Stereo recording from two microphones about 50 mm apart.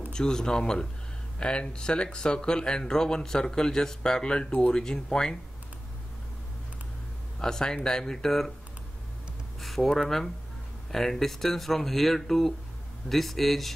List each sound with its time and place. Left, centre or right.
0.1 s speech: centre
7.3 s speech: centre
9.6 s speech: centre